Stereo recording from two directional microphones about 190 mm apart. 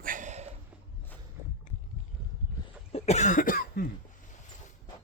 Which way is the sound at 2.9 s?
35° left (ahead or behind).